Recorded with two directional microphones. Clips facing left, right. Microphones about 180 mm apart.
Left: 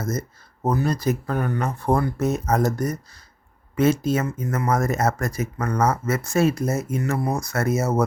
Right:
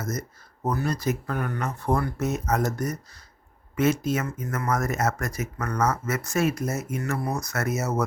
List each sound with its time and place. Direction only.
0.0 s speech: 30° left (ahead or behind)